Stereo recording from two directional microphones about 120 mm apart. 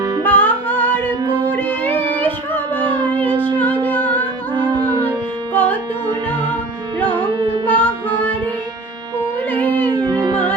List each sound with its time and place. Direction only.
0.3 s music: 15° left (ahead or behind)
2.1 s music: 40° right (ahead or behind)
3.4 s music: 15° left (ahead or behind)
4.5 s music: 35° right (ahead or behind)
5.5 s music: 15° left (ahead or behind)
6.1 s music: 40° right (ahead or behind)
7.7 s child singing: 15° left (ahead or behind)
9.5 s music: 15° left (ahead or behind)
9.9 s music: 35° right (ahead or behind)